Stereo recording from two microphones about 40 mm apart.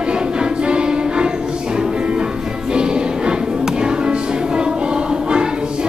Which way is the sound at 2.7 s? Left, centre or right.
Right.